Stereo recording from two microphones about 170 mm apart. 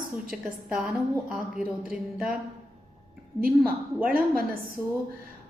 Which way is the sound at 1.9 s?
5° right (ahead or behind).